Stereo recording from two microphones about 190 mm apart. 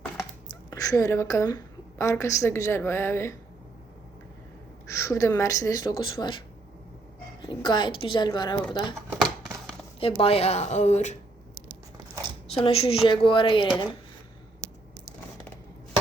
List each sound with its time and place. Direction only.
0.7 s a woman's voice: 15° left (ahead or behind)
4.9 s speech: 15° left (ahead or behind)
7.4 s speech: 25° left (ahead or behind)
10.0 s speech: 30° left (ahead or behind)
12.5 s speech: 30° left (ahead or behind)